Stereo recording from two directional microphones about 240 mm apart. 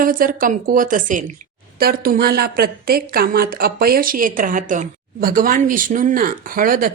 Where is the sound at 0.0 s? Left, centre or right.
Right.